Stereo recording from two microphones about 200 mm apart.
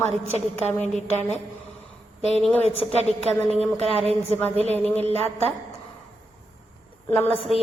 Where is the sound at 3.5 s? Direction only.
30° right (ahead or behind).